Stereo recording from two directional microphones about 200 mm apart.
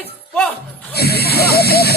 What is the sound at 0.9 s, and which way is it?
Speech, 50° left (ahead or behind).